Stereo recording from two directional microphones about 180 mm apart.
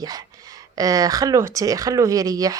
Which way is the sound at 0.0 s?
20° right (ahead or behind).